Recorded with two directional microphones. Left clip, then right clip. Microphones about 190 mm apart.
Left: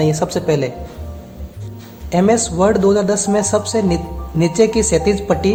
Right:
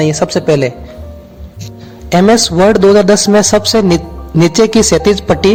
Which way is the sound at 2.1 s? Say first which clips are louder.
Right 6 dB; 35° right (ahead or behind).